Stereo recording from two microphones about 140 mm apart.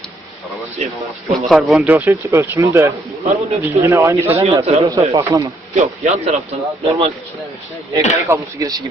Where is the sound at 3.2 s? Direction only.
50° right (ahead or behind).